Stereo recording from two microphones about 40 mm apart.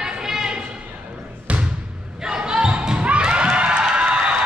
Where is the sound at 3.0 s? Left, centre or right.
Right.